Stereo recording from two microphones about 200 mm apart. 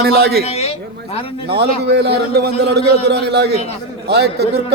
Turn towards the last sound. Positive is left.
turn(degrees=-55)  # may be behind; listen again after turning